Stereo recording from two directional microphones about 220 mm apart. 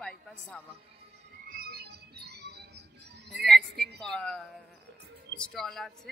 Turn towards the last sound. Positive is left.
turn(degrees=0)  # may be behind; listen again after turning